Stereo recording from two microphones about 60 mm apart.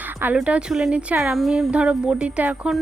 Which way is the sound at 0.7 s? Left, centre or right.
Centre.